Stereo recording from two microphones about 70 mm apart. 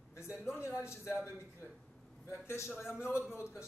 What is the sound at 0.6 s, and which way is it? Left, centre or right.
Speech, left.